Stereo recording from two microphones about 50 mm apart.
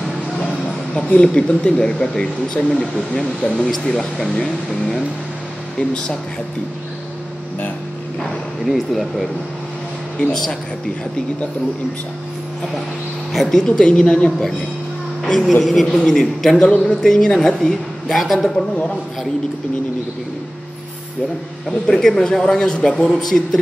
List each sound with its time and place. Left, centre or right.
0.9 s speech: left
8.2 s speech: centre
10.1 s speech: centre
13.5 s speech: centre
15.2 s a woman's voice: centre
16.5 s speech: left
16.8 s a woman's voice: centre
21.6 s speech: centre